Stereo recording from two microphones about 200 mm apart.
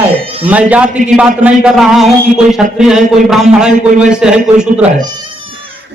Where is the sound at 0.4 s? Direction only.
5° right (ahead or behind).